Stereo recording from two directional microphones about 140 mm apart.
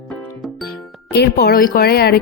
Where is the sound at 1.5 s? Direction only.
90° left.